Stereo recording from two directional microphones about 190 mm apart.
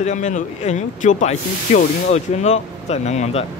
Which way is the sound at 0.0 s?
40° left (ahead or behind).